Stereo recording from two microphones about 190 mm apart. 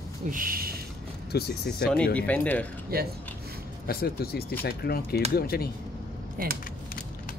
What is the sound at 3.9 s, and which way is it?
Speech, 55° left (ahead or behind).